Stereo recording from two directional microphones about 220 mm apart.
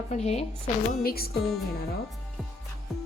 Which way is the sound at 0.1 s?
30° left (ahead or behind).